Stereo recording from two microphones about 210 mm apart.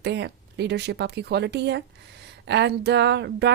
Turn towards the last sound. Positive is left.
turn(degrees=-55)  # may be behind; listen again after turning